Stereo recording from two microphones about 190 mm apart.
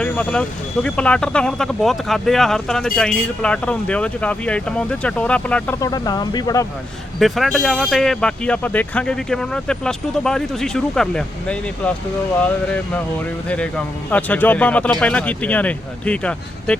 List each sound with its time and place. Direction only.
0.0 s speech: 10° left (ahead or behind)
5.8 s speech: 20° left (ahead or behind)
7.2 s speech: centre (ahead or behind)
14.1 s speech: 10° left (ahead or behind)